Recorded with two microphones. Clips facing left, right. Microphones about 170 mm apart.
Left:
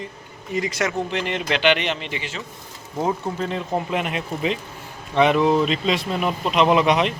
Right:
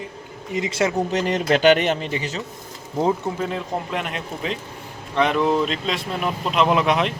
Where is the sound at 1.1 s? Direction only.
40° right (ahead or behind).